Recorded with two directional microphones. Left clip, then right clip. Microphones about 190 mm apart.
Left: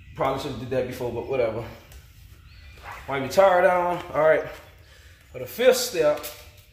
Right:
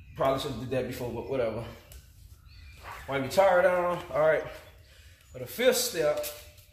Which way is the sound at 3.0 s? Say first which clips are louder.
Left 5 dB; 25° left (ahead or behind).